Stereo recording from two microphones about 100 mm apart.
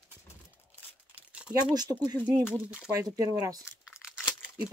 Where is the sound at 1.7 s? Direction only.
40° right (ahead or behind).